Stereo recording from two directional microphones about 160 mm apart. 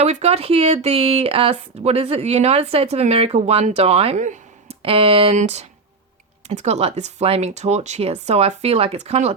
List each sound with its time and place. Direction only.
0.0 s speech: 40° right (ahead or behind)
4.8 s speech: 35° right (ahead or behind)